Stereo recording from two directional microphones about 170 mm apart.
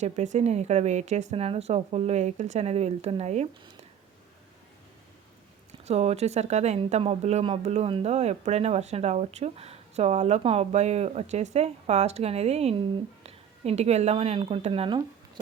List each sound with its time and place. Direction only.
0.0 s speech: 40° right (ahead or behind)
5.8 s speech: 40° right (ahead or behind)